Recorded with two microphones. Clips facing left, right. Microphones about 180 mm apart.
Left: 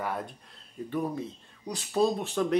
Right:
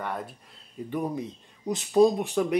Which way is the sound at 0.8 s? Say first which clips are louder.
Right 1 dB; 15° right (ahead or behind).